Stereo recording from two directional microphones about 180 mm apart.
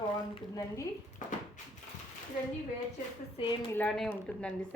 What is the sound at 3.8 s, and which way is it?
Speech, 5° left (ahead or behind).